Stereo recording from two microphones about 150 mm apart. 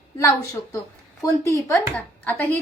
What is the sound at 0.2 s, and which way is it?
A woman's voice, 20° left (ahead or behind).